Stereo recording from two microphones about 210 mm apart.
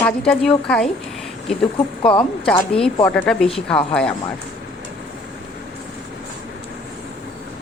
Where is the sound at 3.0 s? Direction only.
5° left (ahead or behind).